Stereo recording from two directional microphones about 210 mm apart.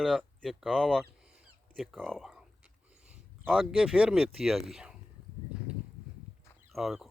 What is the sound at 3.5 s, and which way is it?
Speech, centre (ahead or behind).